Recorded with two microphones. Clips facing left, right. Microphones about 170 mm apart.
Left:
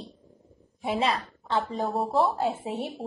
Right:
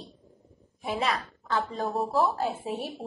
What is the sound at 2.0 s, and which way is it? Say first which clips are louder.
Speech: left 1 dB; centre (ahead or behind).